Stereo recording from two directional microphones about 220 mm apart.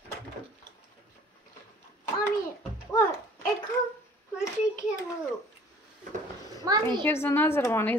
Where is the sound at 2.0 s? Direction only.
15° left (ahead or behind).